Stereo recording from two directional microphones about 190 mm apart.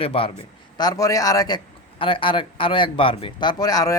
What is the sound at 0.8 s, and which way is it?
A man's voice, 20° left (ahead or behind).